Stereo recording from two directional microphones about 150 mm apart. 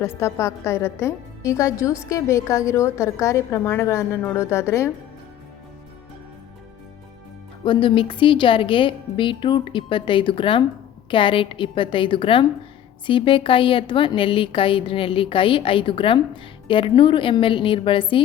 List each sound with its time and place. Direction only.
0.2 s a woman's voice: 20° left (ahead or behind)
7.6 s a woman's voice: 35° left (ahead or behind)